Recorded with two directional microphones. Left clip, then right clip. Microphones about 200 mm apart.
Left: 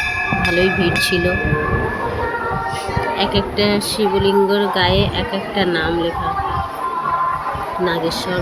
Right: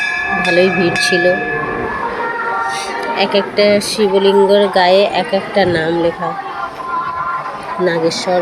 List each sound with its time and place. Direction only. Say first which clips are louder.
0.5 s speech: right 5 dB; 5° left (ahead or behind)
3.2 s speech: right 7 dB; 10° left (ahead or behind)
7.9 s speech: right 7 dB; 10° left (ahead or behind)